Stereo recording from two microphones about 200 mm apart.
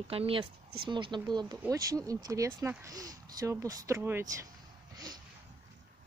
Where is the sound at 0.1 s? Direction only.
30° right (ahead or behind).